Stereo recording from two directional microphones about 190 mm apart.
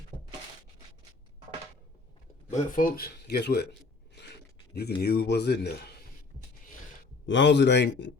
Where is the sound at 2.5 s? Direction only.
45° left (ahead or behind).